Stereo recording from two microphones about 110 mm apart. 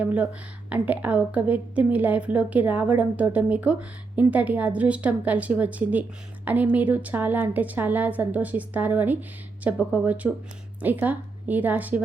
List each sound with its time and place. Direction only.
0.0 s a woman's voice: 15° right (ahead or behind)